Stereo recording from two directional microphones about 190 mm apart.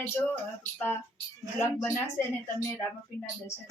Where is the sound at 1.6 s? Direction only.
15° left (ahead or behind).